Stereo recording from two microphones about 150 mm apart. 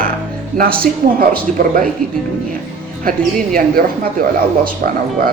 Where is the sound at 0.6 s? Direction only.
85° right.